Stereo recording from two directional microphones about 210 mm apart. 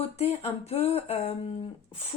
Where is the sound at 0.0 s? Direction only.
30° left (ahead or behind).